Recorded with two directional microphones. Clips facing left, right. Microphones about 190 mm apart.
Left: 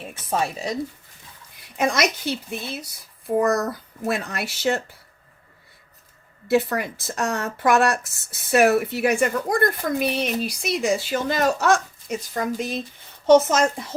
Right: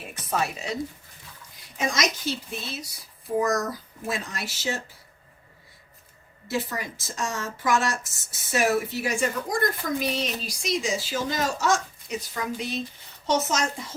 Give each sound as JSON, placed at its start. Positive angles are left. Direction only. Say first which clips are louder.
{"t": 0.3, "sound": "speech", "louder": "left 3 dB", "side_deg": 30}
{"t": 1.8, "sound": "speech", "louder": "left 5 dB", "side_deg": 60}
{"t": 6.5, "sound": "speech", "louder": "left 9 dB", "side_deg": 60}